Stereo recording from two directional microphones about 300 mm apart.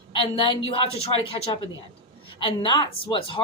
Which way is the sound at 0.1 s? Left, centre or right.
Centre.